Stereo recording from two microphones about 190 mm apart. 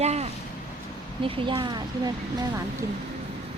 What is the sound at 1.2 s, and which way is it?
Speech, 25° right (ahead or behind).